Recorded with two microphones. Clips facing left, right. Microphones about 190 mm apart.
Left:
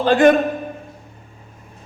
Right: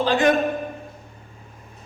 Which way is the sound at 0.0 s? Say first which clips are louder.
Left 6 dB; 55° left (ahead or behind).